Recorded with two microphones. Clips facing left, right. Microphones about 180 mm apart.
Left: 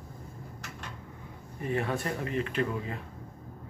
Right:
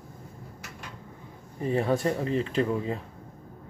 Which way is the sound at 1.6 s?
30° right (ahead or behind).